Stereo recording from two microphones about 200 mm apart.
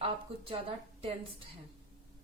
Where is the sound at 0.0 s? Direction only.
25° right (ahead or behind).